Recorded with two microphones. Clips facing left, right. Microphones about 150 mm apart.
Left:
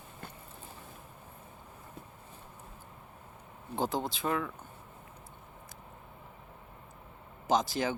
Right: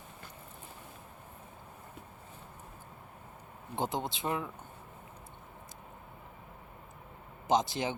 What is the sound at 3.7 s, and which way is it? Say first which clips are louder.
Speech: left 2 dB; 20° right (ahead or behind).